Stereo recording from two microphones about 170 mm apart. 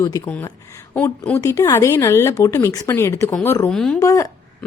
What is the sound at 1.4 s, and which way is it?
A woman's voice, 20° left (ahead or behind).